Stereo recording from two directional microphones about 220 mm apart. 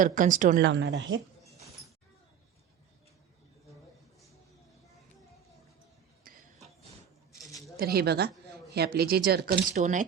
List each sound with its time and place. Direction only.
0.0 s speech: 35° right (ahead or behind)
0.6 s a woman's voice: 55° right (ahead or behind)
6.3 s a sound: 40° right (ahead or behind)
7.8 s speech: 45° right (ahead or behind)
9.7 s speech: 35° right (ahead or behind)